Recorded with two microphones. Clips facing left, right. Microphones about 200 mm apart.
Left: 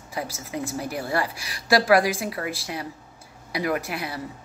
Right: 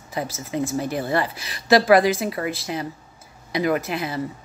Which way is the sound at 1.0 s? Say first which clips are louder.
Right 3 dB; 5° left (ahead or behind).